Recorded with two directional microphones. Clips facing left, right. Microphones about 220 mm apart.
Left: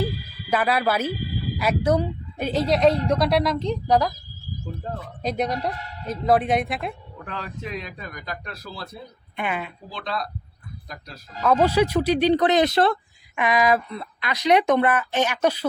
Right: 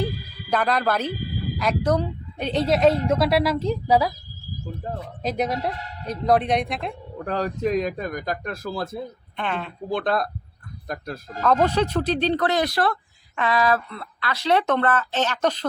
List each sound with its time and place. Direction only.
0.5 s a woman's voice: 5° left (ahead or behind)
5.2 s a woman's voice: centre (ahead or behind)
7.2 s a man's voice: 40° right (ahead or behind)
9.3 s speech: 10° left (ahead or behind)
9.9 s a man's voice: 50° right (ahead or behind)
11.3 s speech: 10° left (ahead or behind)